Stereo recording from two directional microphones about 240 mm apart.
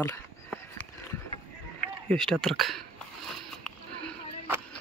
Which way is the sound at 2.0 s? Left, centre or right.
Centre.